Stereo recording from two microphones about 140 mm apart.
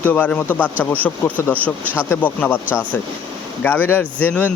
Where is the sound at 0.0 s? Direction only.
10° left (ahead or behind).